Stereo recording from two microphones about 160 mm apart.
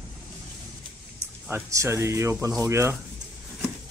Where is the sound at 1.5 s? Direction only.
15° right (ahead or behind).